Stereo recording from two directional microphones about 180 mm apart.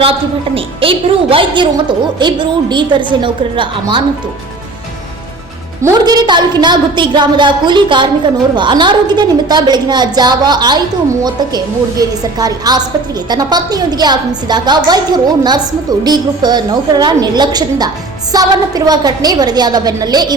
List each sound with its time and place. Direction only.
0.0 s a woman's voice: 30° right (ahead or behind)
5.8 s a woman's voice: 20° right (ahead or behind)